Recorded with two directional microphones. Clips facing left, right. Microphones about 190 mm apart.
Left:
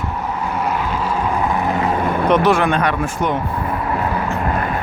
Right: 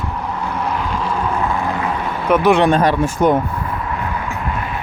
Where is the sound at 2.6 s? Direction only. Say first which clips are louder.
Right 4 dB; 35° right (ahead or behind).